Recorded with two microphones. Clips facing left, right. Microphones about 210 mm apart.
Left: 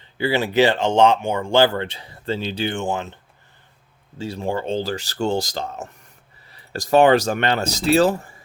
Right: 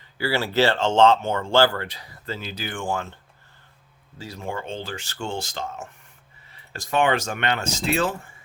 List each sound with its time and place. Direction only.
0.0 s speech: 20° left (ahead or behind)
4.2 s speech: 30° left (ahead or behind)